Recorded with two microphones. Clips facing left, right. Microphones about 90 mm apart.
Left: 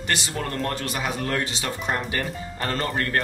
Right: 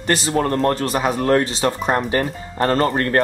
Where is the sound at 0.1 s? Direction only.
40° right (ahead or behind).